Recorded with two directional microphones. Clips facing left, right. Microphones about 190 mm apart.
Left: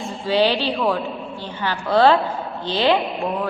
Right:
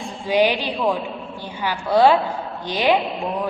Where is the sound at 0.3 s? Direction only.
15° right (ahead or behind).